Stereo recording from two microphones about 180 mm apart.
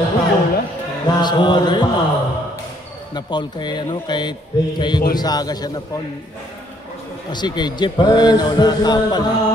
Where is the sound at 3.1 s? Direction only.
25° left (ahead or behind).